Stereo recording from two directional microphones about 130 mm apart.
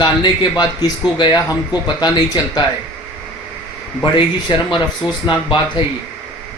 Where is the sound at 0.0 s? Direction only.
35° left (ahead or behind).